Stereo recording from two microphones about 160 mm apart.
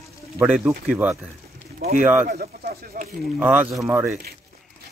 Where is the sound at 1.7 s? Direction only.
70° right (ahead or behind).